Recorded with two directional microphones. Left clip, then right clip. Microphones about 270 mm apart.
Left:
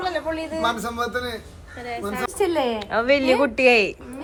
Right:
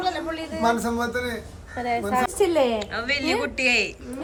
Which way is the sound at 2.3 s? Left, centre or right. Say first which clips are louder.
Left 1 dB; centre.